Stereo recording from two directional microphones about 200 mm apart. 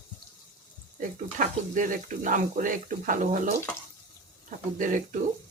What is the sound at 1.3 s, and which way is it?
Speech, 40° right (ahead or behind).